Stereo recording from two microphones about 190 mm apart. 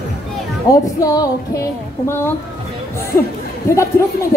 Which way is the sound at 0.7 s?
20° left (ahead or behind).